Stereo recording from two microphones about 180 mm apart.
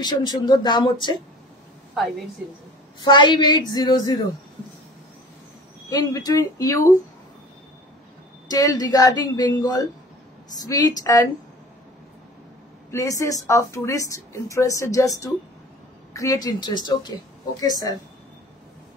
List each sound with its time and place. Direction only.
0.0 s speech: 25° left (ahead or behind)
2.0 s a woman's voice: centre (ahead or behind)
3.0 s speech: 25° left (ahead or behind)
5.9 s speech: 20° left (ahead or behind)
8.5 s speech: 20° left (ahead or behind)
12.9 s a woman's voice: 15° left (ahead or behind)